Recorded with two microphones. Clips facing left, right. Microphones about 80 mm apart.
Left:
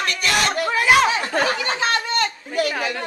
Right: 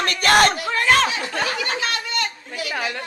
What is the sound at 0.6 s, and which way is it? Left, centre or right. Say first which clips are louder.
Speech: left 2 dB; centre.